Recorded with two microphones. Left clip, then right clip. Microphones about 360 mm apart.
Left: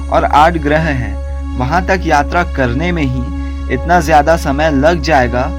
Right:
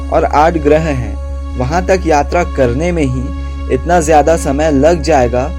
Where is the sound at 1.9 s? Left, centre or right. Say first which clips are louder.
Right 3 dB; left.